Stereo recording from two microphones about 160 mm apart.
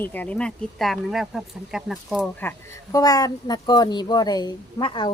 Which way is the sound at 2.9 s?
25° left (ahead or behind).